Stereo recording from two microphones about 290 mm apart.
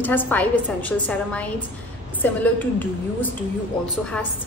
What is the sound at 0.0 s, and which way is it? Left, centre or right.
A woman's voice, centre.